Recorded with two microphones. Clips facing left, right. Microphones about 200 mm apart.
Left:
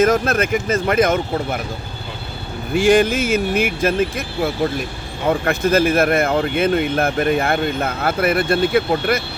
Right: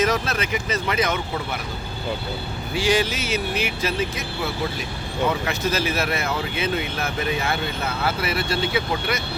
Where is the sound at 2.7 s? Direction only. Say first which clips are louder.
Left 8 dB; 50° left (ahead or behind).